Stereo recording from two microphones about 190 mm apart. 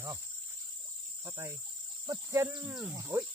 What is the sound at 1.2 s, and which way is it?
Cricket, 15° right (ahead or behind).